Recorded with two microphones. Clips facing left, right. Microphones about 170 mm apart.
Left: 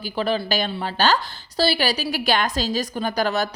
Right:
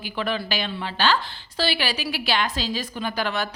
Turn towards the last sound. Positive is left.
turn(degrees=40)  # may be behind; listen again after turning